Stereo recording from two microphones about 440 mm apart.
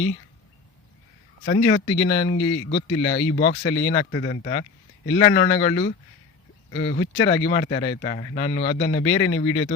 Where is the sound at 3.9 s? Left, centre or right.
Centre.